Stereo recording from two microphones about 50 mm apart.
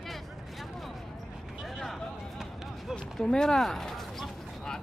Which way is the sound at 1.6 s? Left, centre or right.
Centre.